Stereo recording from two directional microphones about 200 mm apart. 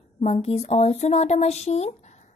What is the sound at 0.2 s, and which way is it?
A woman's voice, 30° left (ahead or behind).